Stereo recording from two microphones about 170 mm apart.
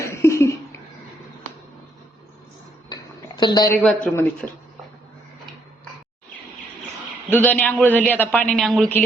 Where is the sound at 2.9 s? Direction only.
25° left (ahead or behind).